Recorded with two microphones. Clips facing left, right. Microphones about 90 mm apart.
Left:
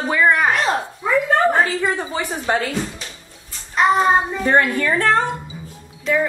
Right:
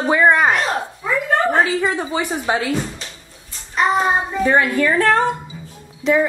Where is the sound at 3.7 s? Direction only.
5° right (ahead or behind).